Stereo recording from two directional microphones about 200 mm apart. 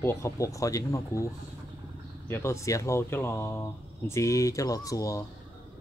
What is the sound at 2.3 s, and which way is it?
Speech, 15° left (ahead or behind).